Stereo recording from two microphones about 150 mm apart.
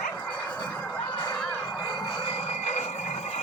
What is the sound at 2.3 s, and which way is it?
Vehicle, 45° left (ahead or behind).